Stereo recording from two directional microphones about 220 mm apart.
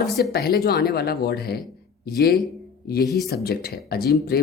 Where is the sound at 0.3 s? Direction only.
45° left (ahead or behind).